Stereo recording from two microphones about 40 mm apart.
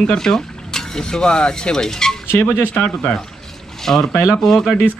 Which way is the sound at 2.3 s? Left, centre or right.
Left.